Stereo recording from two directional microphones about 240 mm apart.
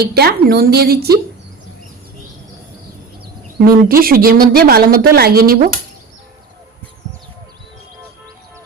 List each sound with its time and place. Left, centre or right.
0.1 s a woman's voice: right
3.6 s a woman's voice: right